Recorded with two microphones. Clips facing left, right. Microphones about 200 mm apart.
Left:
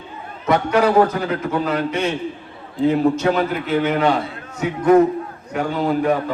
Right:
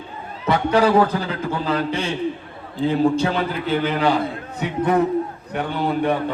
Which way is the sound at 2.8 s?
30° right (ahead or behind).